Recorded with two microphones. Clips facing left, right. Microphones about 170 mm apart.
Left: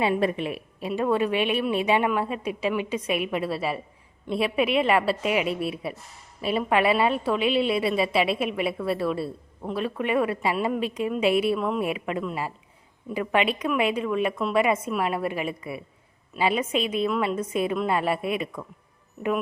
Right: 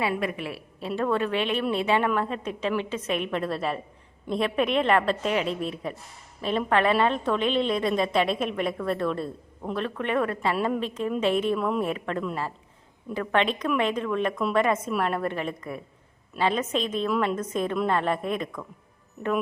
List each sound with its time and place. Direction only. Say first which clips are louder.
0.0 s a woman's voice: left 4 dB; 30° left (ahead or behind)
0.4 s a woman's voice: left 3 dB; 15° left (ahead or behind)